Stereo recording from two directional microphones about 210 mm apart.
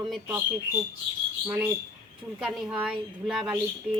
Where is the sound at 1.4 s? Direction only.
5° right (ahead or behind).